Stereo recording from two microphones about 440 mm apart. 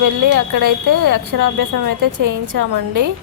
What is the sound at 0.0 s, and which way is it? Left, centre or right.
Speech, right.